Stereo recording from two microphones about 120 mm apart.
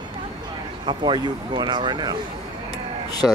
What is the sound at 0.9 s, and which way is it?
Speech, 40° right (ahead or behind).